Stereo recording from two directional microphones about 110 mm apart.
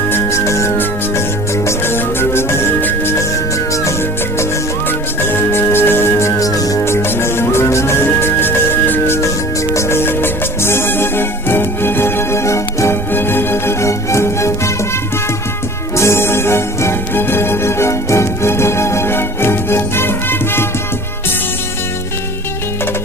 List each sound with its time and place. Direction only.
0.1 s music: 25° left (ahead or behind)
4.9 s music: 20° left (ahead or behind)
16.0 s music: 25° left (ahead or behind)